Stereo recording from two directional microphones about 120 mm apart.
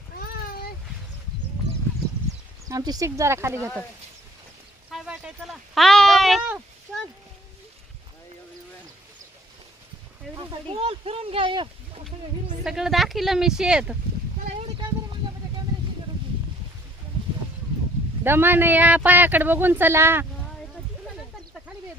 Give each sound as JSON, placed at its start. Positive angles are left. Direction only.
{"t": 2.6, "sound": "speech", "side_deg": -30}
{"t": 4.9, "sound": "a sound", "side_deg": -5}
{"t": 10.3, "sound": "speech", "side_deg": -50}
{"t": 12.6, "sound": "speech", "side_deg": -5}
{"t": 18.2, "sound": "speech", "side_deg": -20}